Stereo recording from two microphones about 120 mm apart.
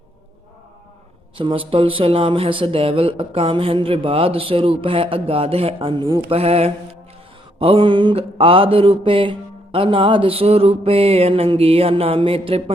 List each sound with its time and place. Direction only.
1.4 s speech: 45° right (ahead or behind)